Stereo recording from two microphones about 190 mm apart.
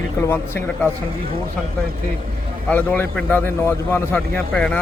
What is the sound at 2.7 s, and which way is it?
A man's voice, 10° left (ahead or behind).